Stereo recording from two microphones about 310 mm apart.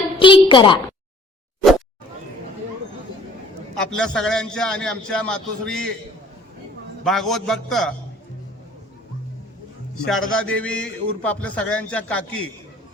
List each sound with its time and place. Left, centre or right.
0.2 s a sound: centre
3.8 s a man's voice: centre
7.0 s a man's voice: centre
10.1 s a man's voice: centre